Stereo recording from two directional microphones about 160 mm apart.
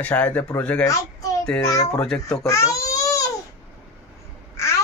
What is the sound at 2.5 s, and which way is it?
Baby cry, 20° left (ahead or behind).